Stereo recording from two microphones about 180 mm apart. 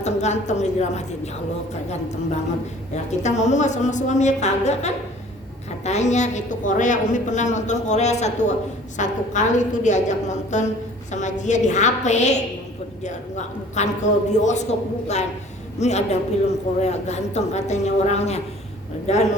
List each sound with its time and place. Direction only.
0.0 s a woman's voice: 40° left (ahead or behind)
2.9 s a woman's voice: 40° left (ahead or behind)